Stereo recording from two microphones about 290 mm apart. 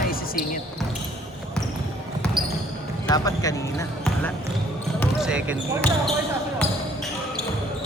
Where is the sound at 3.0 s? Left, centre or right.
Centre.